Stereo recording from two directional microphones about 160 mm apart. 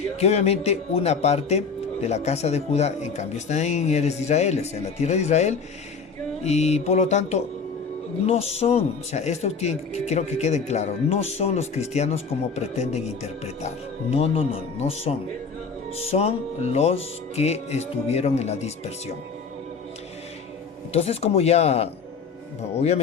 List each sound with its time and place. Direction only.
0.2 s speech: 40° left (ahead or behind)
20.9 s speech: 40° left (ahead or behind)